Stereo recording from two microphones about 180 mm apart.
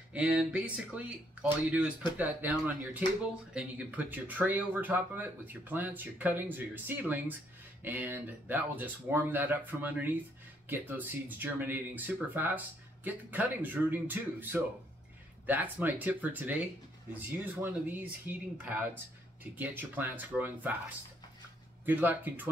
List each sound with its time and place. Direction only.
0.1 s speech: 5° right (ahead or behind)
21.8 s speech: 10° right (ahead or behind)